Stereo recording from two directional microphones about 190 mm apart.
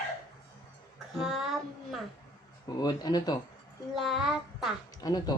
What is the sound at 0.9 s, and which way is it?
Child singing, centre (ahead or behind).